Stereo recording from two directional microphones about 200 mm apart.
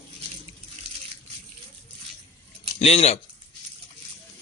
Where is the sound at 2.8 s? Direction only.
30° left (ahead or behind).